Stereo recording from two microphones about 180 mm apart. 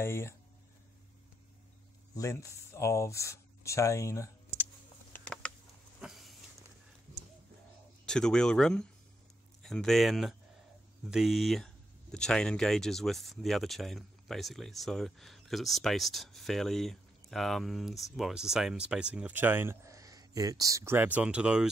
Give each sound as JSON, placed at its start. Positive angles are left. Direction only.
{"t": 0.0, "sound": "speech", "side_deg": 15}
{"t": 2.1, "sound": "speech", "side_deg": 15}
{"t": 5.1, "sound": "a sound", "side_deg": 5}
{"t": 8.0, "sound": "speech", "side_deg": 5}